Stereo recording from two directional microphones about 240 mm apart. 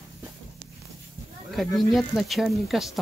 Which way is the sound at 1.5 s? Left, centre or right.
Centre.